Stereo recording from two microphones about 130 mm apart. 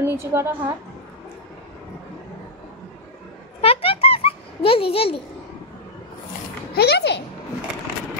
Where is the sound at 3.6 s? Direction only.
45° left (ahead or behind).